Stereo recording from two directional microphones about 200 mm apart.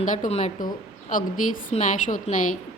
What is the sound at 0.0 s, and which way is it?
Speech, 35° left (ahead or behind).